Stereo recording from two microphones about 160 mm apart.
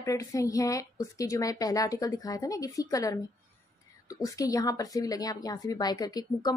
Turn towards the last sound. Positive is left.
turn(degrees=25)  # may be behind; listen again after turning